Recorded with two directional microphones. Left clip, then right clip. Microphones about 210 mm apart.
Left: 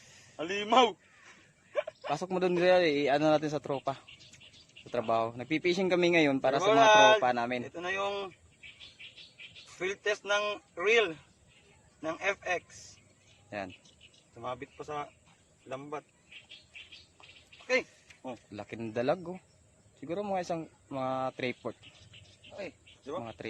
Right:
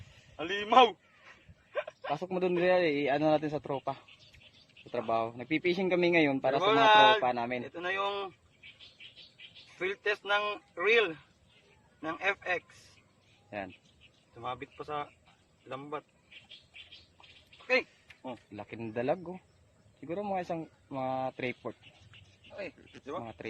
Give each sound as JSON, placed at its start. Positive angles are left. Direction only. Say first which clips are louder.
{"t": 0.3, "sound": "a man's voice", "louder": "right 2 dB", "side_deg": 15}
{"t": 8.8, "sound": "a sound", "louder": "left 2 dB", "side_deg": 50}
{"t": 9.7, "sound": "speech", "louder": "even", "side_deg": 5}
{"t": 16.3, "sound": "bird", "louder": "left 2 dB", "side_deg": 50}
{"t": 17.7, "sound": "speech", "louder": "right 1 dB", "side_deg": 5}